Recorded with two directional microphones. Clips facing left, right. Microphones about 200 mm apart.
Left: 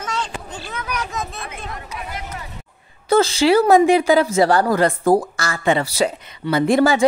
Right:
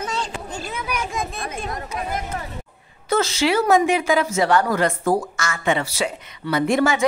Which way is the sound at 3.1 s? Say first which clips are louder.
Left 5 dB; 30° left (ahead or behind).